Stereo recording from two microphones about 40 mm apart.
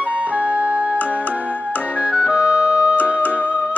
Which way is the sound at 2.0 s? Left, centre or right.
Right.